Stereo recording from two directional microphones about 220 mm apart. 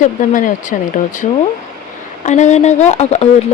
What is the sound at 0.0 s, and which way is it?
Speech, 35° left (ahead or behind).